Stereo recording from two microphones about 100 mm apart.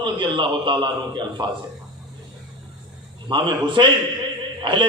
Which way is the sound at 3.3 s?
50° right (ahead or behind).